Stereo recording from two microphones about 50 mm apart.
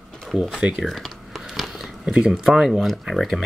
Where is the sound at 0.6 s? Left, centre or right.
Right.